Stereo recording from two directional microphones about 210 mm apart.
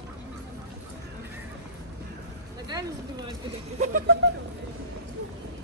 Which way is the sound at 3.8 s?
40° right (ahead or behind).